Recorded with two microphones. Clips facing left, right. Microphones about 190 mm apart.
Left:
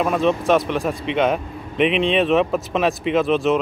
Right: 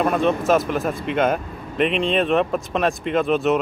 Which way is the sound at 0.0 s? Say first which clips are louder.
Even; centre (ahead or behind).